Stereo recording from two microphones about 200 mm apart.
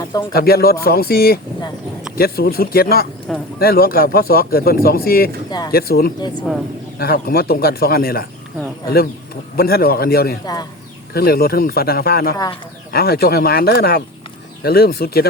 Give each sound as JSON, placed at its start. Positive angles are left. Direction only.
{"t": 0.0, "sound": "speech", "side_deg": 20}
{"t": 0.3, "sound": "speech", "side_deg": 50}
{"t": 5.5, "sound": "speech", "side_deg": 20}
{"t": 5.7, "sound": "speech", "side_deg": 50}
{"t": 6.5, "sound": "a man's voice", "side_deg": -5}
{"t": 7.0, "sound": "speech", "side_deg": 50}
{"t": 9.6, "sound": "speech", "side_deg": 50}
{"t": 10.4, "sound": "a man's voice", "side_deg": 20}
{"t": 11.1, "sound": "speech", "side_deg": 50}